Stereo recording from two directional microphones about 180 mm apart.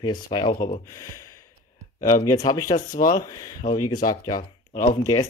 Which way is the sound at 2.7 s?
50° left (ahead or behind).